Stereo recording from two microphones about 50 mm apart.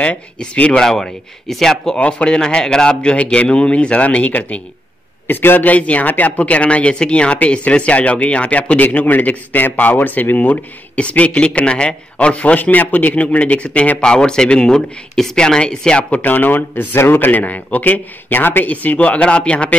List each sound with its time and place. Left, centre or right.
0.7 s speech: centre
2.0 s speech: left
5.2 s a man's voice: left
5.7 s speech: left
16.2 s speech: left